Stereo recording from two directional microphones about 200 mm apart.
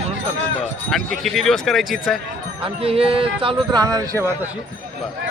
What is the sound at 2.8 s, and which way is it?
Speech, 30° right (ahead or behind).